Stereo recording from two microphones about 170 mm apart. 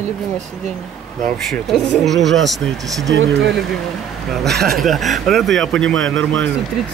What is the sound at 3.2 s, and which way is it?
Speech, 90° right.